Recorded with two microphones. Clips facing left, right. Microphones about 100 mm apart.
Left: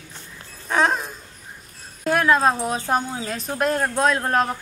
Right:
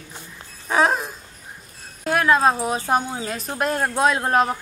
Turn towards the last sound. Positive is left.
turn(degrees=-10)  # may be behind; listen again after turning